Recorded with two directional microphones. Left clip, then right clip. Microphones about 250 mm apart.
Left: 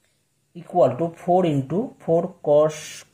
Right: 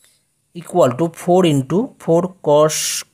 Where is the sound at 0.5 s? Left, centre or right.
Right.